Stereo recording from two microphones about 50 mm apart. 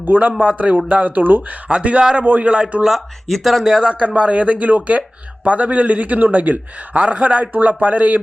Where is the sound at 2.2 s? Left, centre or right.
Right.